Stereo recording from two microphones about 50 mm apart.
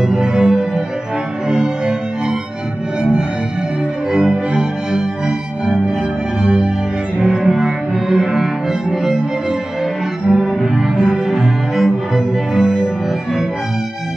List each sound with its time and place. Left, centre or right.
0.0 s music: centre
6.4 s music: centre
7.2 s cello: centre
10.3 s cello: centre
12.5 s music: centre